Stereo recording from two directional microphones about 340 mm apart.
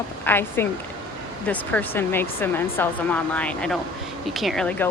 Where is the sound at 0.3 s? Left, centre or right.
Centre.